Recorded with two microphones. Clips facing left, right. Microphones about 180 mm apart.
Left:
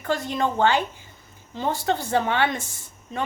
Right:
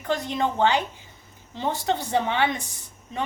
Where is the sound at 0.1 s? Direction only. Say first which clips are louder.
Left 1 dB; 20° right (ahead or behind).